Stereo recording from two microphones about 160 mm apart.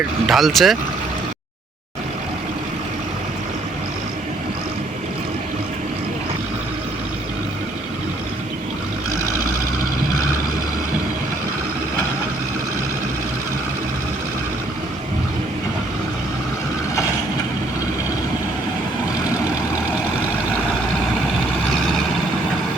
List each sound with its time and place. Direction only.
0.3 s speech: centre (ahead or behind)